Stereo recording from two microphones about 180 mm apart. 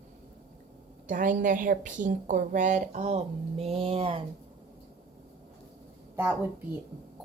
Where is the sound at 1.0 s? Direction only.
45° right (ahead or behind).